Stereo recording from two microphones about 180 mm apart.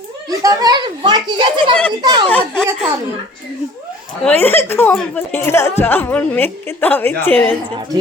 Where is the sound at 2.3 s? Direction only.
10° left (ahead or behind).